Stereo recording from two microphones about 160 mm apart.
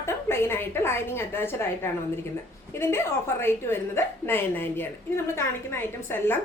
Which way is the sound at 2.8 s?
15° left (ahead or behind).